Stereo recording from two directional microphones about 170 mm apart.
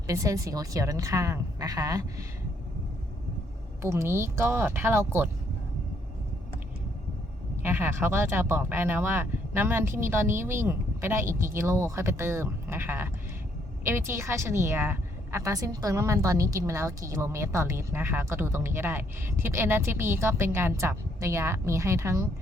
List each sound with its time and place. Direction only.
0.1 s a woman's voice: 20° right (ahead or behind)
3.8 s a woman's voice: 15° right (ahead or behind)
7.5 s a woman's voice: 15° right (ahead or behind)